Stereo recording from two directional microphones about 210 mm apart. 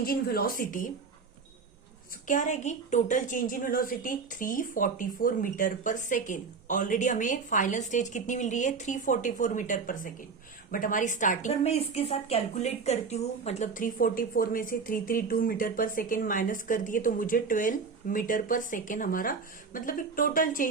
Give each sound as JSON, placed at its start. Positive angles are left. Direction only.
{"t": 0.0, "sound": "speech", "side_deg": 45}
{"t": 2.2, "sound": "a woman's voice", "side_deg": 35}